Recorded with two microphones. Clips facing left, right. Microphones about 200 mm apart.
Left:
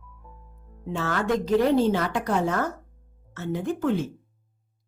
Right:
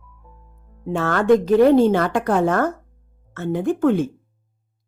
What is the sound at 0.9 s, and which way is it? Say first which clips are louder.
A woman's voice: right 9 dB; 55° right (ahead or behind).